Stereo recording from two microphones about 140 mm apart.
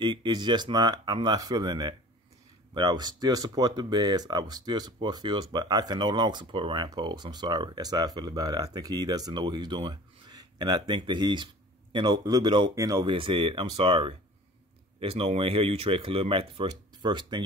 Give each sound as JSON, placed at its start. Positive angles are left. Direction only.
{"t": 0.0, "sound": "speech", "side_deg": -30}
{"t": 13.0, "sound": "speech", "side_deg": -35}